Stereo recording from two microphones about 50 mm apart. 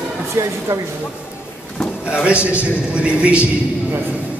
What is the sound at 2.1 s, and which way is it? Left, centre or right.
A man's voice, centre.